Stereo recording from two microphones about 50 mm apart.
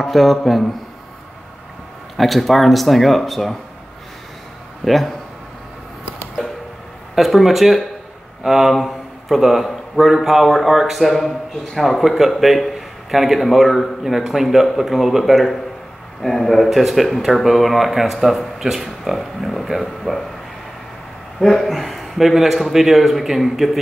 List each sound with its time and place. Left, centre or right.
0.0 s a man's voice: centre
2.1 s a man's voice: centre
4.8 s a man's voice: centre
7.2 s a man's voice: centre
21.4 s a man's voice: centre